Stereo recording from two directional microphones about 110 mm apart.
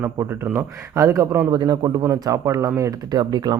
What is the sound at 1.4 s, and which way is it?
Speech, 40° right (ahead or behind).